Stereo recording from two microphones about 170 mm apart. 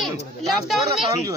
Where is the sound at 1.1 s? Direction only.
20° right (ahead or behind).